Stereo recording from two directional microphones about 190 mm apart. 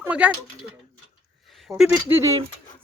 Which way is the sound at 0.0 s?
5° right (ahead or behind).